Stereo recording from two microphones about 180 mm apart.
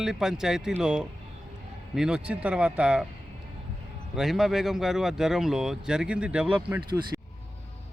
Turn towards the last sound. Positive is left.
turn(degrees=-25)  # may be behind; listen again after turning